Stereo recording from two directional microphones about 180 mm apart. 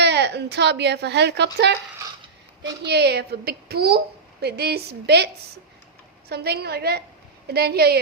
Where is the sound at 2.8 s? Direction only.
65° right (ahead or behind).